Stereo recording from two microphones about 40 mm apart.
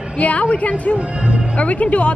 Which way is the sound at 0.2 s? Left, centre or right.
Left.